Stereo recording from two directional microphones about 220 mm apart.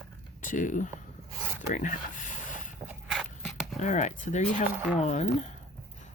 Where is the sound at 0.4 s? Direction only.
35° left (ahead or behind).